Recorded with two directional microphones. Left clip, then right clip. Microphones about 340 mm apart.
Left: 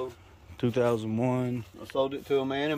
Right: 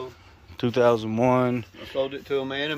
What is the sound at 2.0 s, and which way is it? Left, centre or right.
Speech, left.